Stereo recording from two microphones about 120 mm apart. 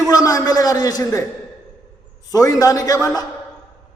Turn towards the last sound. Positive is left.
turn(degrees=30)  # may be behind; listen again after turning